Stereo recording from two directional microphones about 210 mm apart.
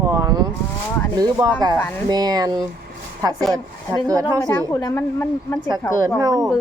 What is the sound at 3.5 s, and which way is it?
Speech, 15° right (ahead or behind).